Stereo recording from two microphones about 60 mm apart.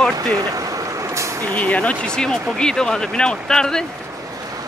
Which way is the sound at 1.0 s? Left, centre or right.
Right.